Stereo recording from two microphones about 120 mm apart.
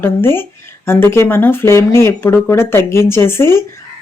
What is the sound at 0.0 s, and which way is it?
Speech, 20° left (ahead or behind).